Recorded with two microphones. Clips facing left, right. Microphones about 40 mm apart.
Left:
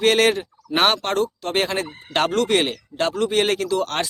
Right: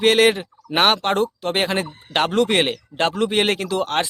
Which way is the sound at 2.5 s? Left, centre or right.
Right.